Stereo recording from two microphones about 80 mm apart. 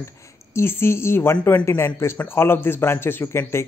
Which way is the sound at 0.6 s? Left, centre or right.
Left.